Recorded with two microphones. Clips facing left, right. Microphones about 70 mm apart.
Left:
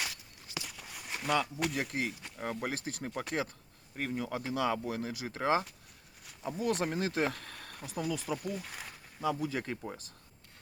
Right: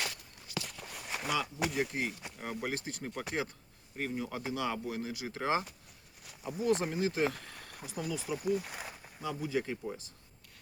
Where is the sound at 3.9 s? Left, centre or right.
Left.